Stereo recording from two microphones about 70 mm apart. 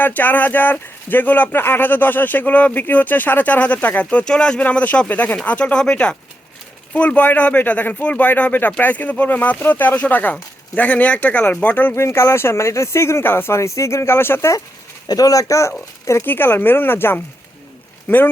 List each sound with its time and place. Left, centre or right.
0.0 s speech: left
11.9 s speech: left
15.0 s speech: left
16.2 s speech: left